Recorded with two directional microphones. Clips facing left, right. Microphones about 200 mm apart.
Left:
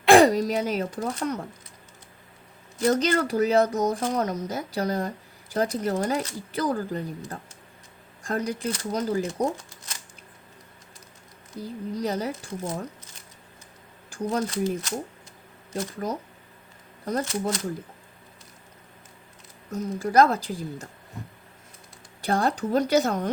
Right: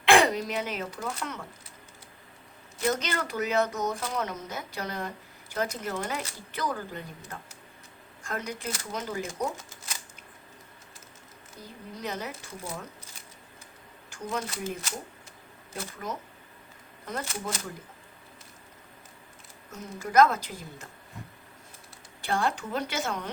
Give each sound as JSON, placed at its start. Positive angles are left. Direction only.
{"t": 0.0, "sound": "speech", "side_deg": 40}
{"t": 2.8, "sound": "speech", "side_deg": 35}
{"t": 11.9, "sound": "speech", "side_deg": 35}
{"t": 14.1, "sound": "speech", "side_deg": 35}
{"t": 19.7, "sound": "speech", "side_deg": 35}
{"t": 22.2, "sound": "speech", "side_deg": 40}